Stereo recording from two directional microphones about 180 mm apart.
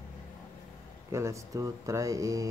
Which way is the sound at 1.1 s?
15° right (ahead or behind).